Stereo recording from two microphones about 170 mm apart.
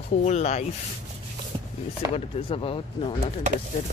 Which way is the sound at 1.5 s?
30° right (ahead or behind).